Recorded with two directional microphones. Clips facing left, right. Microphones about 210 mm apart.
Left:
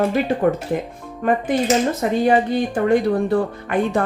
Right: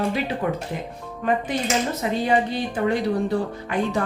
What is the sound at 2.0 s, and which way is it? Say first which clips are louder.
Speech: left 5 dB; 50° left (ahead or behind).